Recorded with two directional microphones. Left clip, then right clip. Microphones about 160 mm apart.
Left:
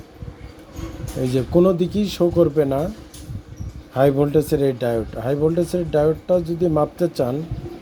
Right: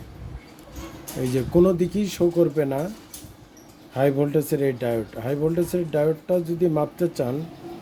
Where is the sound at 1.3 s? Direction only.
10° left (ahead or behind).